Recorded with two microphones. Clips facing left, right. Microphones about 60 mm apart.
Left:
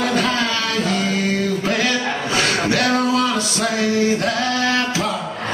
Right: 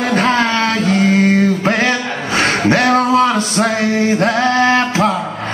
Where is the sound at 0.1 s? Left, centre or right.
Right.